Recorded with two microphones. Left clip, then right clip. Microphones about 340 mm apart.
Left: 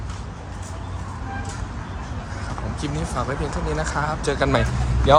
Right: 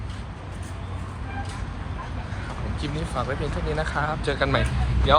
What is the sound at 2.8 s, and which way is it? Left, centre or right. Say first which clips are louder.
Speech: left 2 dB; centre.